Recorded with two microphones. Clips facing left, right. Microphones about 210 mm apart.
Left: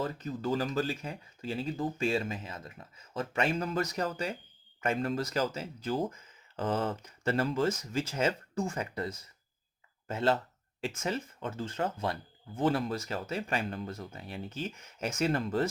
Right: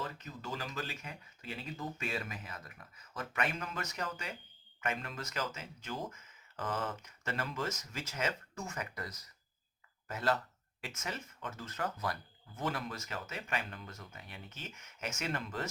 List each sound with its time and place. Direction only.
0.0 s speech: 35° left (ahead or behind)